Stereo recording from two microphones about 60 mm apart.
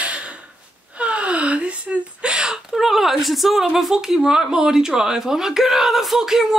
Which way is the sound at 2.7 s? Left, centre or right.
Centre.